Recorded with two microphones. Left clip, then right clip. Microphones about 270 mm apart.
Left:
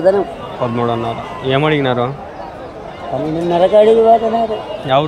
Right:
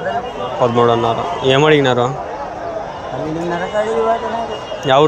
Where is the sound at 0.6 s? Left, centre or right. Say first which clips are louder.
Right 5 dB; centre.